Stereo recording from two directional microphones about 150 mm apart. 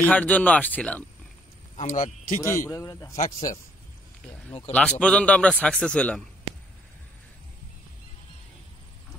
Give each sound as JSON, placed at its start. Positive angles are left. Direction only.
{"t": 0.0, "sound": "a man's voice", "side_deg": 10}
{"t": 1.8, "sound": "speech", "side_deg": 55}
{"t": 2.4, "sound": "a man's voice", "side_deg": 20}
{"t": 5.0, "sound": "a man's voice", "side_deg": 10}